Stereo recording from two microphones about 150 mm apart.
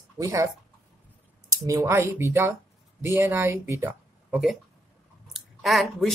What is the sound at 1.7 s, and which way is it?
Speech, 20° right (ahead or behind).